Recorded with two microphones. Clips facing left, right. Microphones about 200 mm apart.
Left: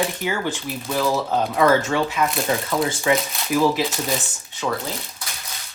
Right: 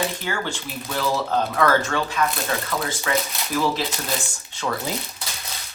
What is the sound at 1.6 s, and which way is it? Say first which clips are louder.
Speech: left 4 dB; 15° left (ahead or behind).